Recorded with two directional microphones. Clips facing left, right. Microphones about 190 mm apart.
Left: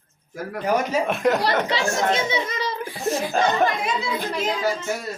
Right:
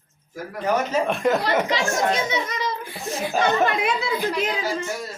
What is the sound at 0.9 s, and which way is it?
Speech, centre (ahead or behind).